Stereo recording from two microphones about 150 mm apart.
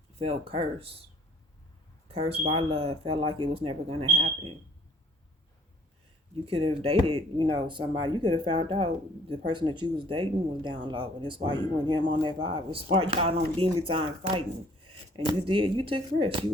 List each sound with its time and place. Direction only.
0.2 s speech: 40° right (ahead or behind)
2.0 s speech: 40° right (ahead or behind)
6.3 s speech: 40° right (ahead or behind)